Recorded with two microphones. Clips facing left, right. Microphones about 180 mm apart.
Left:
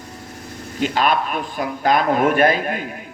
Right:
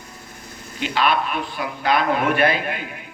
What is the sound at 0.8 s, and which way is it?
A man's voice, 45° left (ahead or behind).